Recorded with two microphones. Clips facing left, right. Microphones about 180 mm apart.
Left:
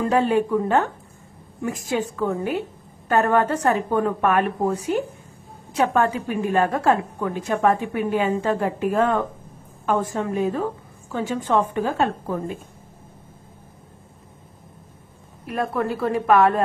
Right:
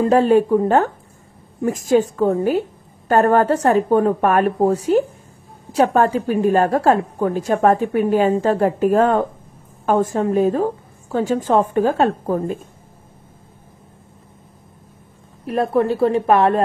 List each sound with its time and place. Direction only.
0.0 s a woman's voice: 40° right (ahead or behind)
15.4 s speech: 30° right (ahead or behind)